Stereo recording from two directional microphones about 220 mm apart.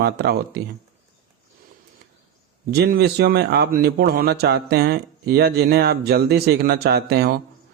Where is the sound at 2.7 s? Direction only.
45° right (ahead or behind).